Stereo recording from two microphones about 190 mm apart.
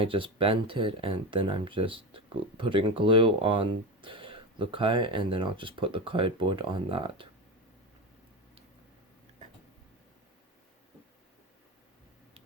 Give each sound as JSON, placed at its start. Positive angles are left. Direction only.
{"t": 0.0, "sound": "speech", "side_deg": -30}